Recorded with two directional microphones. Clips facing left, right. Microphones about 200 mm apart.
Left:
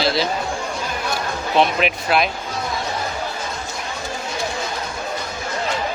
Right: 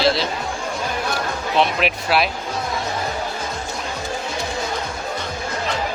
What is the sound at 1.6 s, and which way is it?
Speech, centre (ahead or behind).